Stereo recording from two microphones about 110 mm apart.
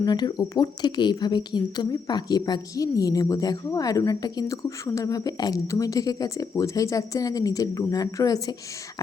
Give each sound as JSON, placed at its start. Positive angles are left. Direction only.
{"t": 0.0, "sound": "speech", "side_deg": 40}